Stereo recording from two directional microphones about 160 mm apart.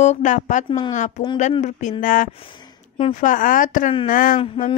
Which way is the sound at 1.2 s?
45° left (ahead or behind).